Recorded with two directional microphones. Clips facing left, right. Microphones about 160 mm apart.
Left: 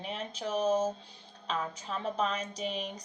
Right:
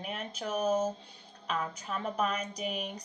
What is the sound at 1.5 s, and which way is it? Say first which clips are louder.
Speech: even; 30° left (ahead or behind).